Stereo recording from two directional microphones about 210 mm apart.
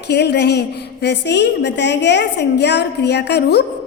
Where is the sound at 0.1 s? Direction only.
55° left (ahead or behind).